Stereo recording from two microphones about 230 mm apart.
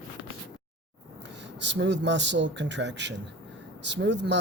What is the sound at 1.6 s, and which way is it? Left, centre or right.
Speech, right.